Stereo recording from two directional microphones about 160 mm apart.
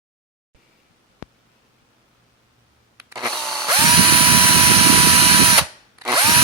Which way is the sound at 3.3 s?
Centre (ahead or behind).